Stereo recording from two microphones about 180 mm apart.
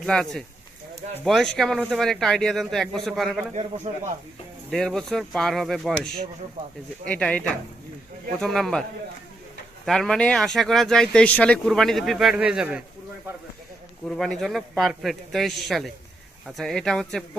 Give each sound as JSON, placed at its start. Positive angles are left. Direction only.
{"t": 0.0, "sound": "speech", "side_deg": 5}
{"t": 3.9, "sound": "speech", "side_deg": -35}
{"t": 4.7, "sound": "speech", "side_deg": 0}
{"t": 7.1, "sound": "speech", "side_deg": 5}
{"t": 9.8, "sound": "speech", "side_deg": 0}
{"t": 14.1, "sound": "speech", "side_deg": 5}